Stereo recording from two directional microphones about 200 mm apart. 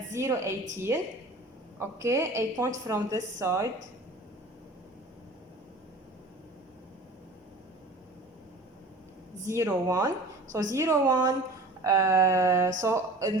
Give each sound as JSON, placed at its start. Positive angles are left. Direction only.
{"t": 0.1, "sound": "a woman's voice", "side_deg": -15}
{"t": 9.5, "sound": "a woman's voice", "side_deg": -15}